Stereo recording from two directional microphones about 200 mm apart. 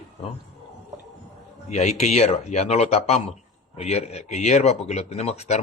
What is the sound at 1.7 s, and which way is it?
Speech, 35° left (ahead or behind).